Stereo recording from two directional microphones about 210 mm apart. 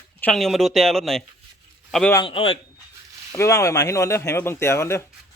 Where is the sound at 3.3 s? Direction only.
15° left (ahead or behind).